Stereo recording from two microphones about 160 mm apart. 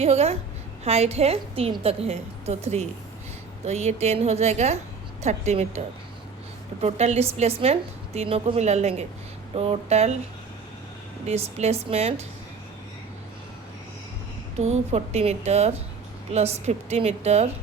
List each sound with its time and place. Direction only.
0.0 s a woman's voice: 40° right (ahead or behind)
6.8 s a woman's voice: 40° right (ahead or behind)
11.3 s a woman's voice: 45° right (ahead or behind)
14.6 s a woman's voice: 45° right (ahead or behind)